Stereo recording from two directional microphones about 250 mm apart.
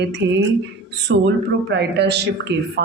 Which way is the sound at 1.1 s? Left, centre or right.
Right.